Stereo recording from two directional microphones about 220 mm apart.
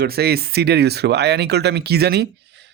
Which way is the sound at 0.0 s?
45° right (ahead or behind).